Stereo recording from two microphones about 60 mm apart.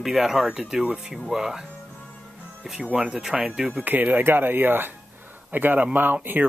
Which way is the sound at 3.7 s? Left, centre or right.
Right.